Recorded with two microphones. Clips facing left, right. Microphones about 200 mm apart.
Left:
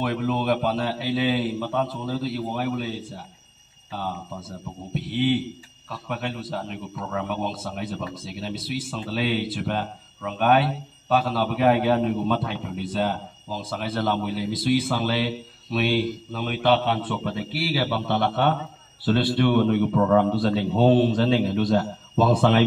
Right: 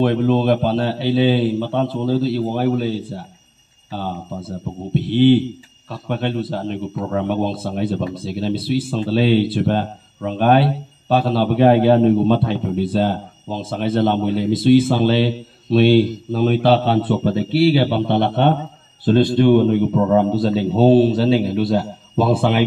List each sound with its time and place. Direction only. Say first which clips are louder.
0.0 s a man's voice: right 9 dB; 30° right (ahead or behind); by 22.7 s 10° right (ahead or behind)